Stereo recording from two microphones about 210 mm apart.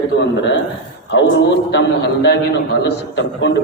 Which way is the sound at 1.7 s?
55° left (ahead or behind).